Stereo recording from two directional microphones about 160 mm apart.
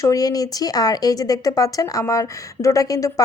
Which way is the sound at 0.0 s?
20° left (ahead or behind).